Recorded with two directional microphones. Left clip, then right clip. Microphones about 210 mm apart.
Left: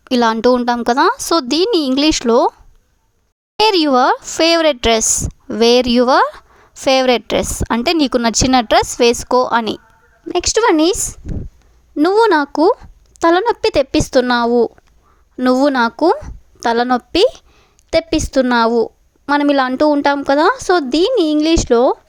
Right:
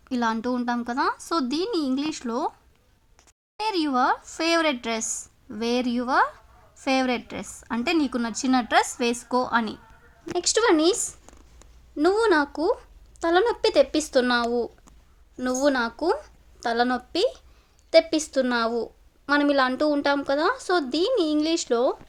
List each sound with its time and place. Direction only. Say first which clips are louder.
0.0 s speech: left 13 dB; 50° left (ahead or behind)
3.6 s a woman's voice: left 12 dB; 45° left (ahead or behind)